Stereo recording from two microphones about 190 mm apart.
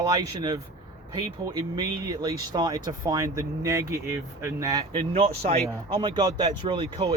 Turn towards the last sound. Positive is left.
turn(degrees=-25)  # may be behind; listen again after turning